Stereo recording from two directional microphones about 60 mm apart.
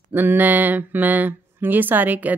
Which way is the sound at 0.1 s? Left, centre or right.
Right.